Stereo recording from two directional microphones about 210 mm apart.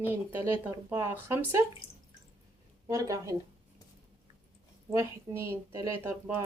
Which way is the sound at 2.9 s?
15° right (ahead or behind).